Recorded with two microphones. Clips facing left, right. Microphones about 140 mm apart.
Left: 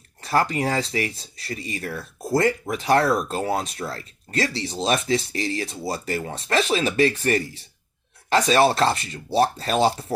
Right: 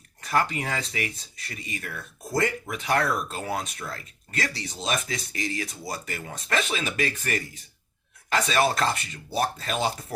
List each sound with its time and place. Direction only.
0.2 s speech: 30° left (ahead or behind)